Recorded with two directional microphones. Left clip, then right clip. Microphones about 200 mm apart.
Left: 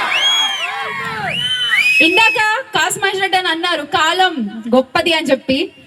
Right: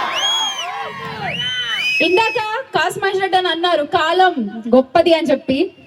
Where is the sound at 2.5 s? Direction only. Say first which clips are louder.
Left 2 dB; 55° right (ahead or behind).